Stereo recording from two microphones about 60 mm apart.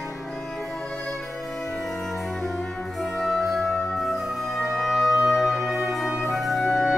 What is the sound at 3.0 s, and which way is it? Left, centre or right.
Music, centre.